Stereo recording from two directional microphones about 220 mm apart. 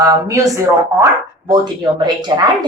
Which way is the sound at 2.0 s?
20° right (ahead or behind).